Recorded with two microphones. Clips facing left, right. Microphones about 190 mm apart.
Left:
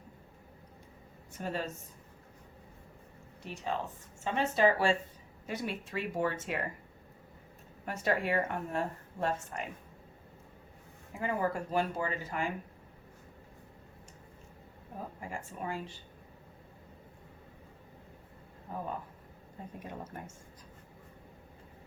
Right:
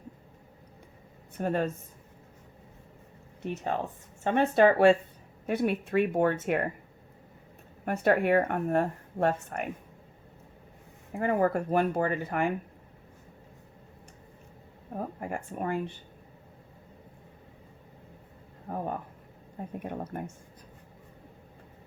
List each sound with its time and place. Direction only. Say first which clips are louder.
1.4 s speech: right 8 dB; 55° right (ahead or behind)
3.4 s speech: right 5 dB; 55° right (ahead or behind)
7.9 s speech: right 7 dB; 55° right (ahead or behind)
11.1 s speech: right 7 dB; 55° right (ahead or behind)
14.9 s speech: right 7 dB; 60° right (ahead or behind)
18.7 s a sound: right 5 dB; 55° right (ahead or behind)
19.6 s speech: right 7 dB; 55° right (ahead or behind)